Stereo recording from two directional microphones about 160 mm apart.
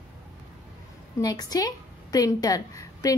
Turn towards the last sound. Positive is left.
turn(degrees=20)  # may be behind; listen again after turning